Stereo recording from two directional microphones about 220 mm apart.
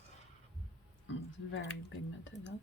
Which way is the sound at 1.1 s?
60° left (ahead or behind).